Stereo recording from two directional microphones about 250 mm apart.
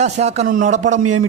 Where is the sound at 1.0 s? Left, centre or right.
Right.